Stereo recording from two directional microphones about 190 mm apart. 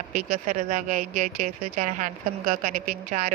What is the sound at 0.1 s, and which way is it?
Speech, 40° right (ahead or behind).